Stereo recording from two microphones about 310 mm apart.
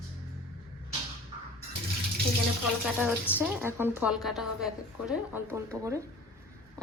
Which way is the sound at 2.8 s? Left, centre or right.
Centre.